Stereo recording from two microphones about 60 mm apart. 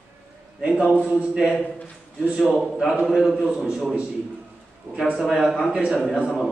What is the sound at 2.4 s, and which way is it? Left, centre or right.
A man's voice, centre.